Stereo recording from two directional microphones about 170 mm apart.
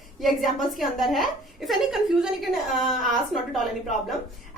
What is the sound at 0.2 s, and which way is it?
A woman's voice, centre (ahead or behind).